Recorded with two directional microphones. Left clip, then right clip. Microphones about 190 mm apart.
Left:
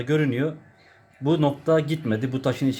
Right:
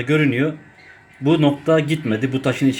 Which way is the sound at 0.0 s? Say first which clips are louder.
Right 5 dB; 5° left (ahead or behind).